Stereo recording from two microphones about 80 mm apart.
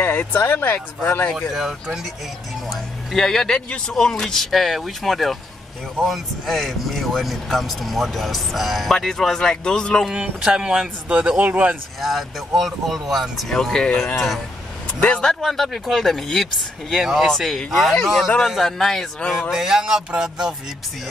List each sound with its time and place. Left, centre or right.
0.0 s a sound: left
0.5 s speech: left
1.5 s speech: centre
3.1 s speech: centre
10.2 s speech: centre
12.0 s speech: centre
15.4 s speech: centre
19.5 s speech: centre